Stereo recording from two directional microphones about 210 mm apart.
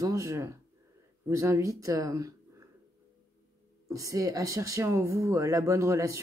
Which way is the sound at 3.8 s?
15° right (ahead or behind).